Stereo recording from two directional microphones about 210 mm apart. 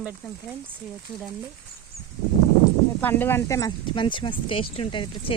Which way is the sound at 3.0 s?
10° left (ahead or behind).